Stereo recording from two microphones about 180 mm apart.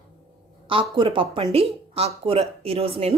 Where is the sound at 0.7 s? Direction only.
30° right (ahead or behind).